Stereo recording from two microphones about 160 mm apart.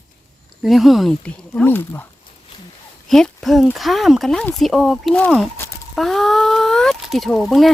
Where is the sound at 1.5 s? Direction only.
15° left (ahead or behind).